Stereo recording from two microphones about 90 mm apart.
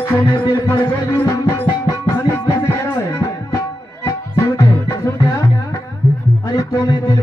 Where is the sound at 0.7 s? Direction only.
30° left (ahead or behind).